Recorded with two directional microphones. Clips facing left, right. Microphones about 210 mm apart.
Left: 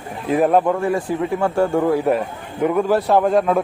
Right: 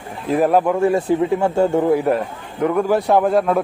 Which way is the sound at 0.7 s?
25° right (ahead or behind).